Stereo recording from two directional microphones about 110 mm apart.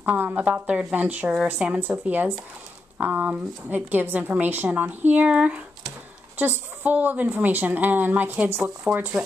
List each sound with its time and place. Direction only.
0.0 s speech: 15° right (ahead or behind)